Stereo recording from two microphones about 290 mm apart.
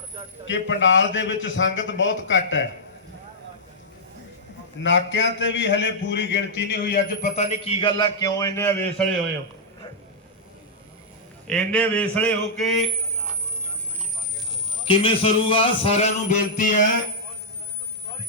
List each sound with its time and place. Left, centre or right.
0.4 s a man's voice: left
4.8 s a man's voice: left; by 9.0 s centre
11.4 s a man's voice: centre
14.8 s a man's voice: centre